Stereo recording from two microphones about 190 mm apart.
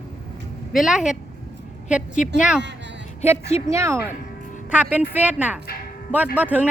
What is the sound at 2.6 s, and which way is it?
Speech, 65° right (ahead or behind).